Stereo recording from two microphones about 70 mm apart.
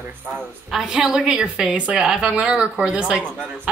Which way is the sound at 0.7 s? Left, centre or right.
Centre.